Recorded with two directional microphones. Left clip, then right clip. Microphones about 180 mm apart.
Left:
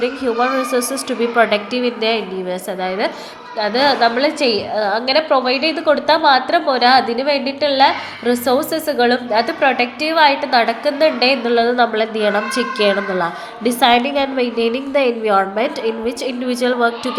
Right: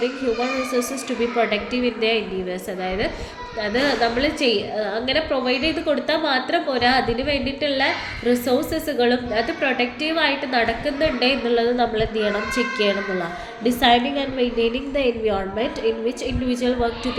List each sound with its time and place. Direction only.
0.7 s a woman's voice: 25° left (ahead or behind)